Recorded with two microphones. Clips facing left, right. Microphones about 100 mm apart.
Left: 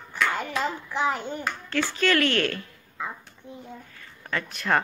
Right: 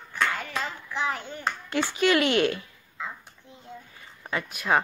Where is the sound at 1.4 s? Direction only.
20° right (ahead or behind).